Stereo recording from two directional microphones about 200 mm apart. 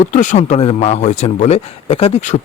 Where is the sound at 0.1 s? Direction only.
40° left (ahead or behind).